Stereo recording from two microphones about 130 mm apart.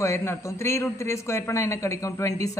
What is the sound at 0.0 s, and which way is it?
Speech, 20° left (ahead or behind).